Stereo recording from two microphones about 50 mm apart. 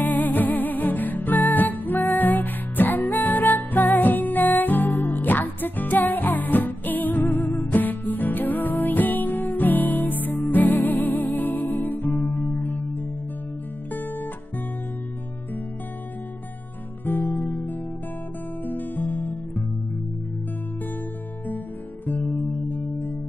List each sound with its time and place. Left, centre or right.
0.0 s music: left
13.9 s music: left
17.0 s music: left
22.0 s music: left